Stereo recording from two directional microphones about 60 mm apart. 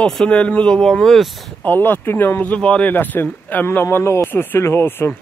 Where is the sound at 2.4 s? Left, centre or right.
Left.